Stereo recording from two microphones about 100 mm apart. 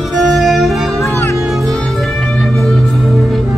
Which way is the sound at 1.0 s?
25° left (ahead or behind).